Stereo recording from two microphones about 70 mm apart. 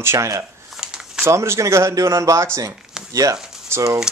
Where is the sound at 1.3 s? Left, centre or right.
Right.